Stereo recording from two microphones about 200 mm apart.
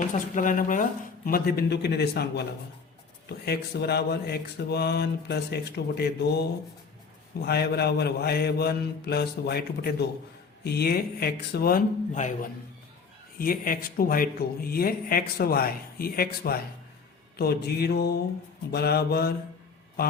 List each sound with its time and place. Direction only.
0.1 s speech: 40° left (ahead or behind)